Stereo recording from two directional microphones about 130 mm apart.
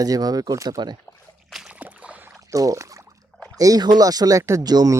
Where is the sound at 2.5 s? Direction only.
25° right (ahead or behind).